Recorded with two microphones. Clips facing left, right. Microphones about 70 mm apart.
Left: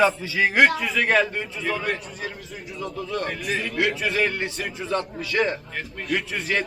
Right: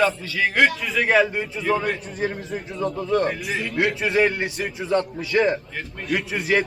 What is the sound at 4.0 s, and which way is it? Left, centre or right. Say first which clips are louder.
A man's voice: right 4 dB; right.